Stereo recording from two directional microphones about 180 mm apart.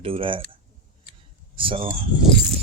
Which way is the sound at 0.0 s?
30° right (ahead or behind).